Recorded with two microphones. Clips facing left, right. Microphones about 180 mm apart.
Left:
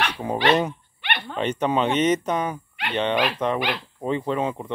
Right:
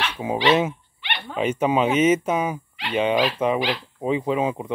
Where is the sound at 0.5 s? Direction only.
5° right (ahead or behind).